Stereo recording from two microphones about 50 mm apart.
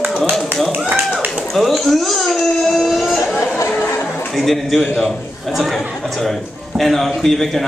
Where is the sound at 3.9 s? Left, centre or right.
Left.